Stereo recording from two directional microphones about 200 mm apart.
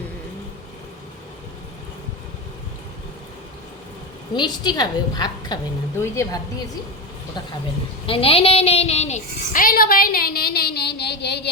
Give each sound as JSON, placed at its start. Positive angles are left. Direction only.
{"t": 4.4, "sound": "a woman's voice", "side_deg": 20}
{"t": 8.0, "sound": "a woman's voice", "side_deg": 30}